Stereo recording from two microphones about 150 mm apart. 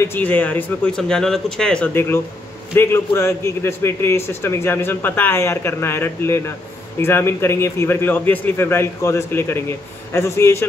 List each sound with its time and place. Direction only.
0.0 s a man's voice: 15° left (ahead or behind)